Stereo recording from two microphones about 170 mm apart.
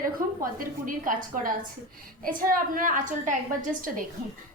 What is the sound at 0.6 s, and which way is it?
A woman's voice, 55° right (ahead or behind).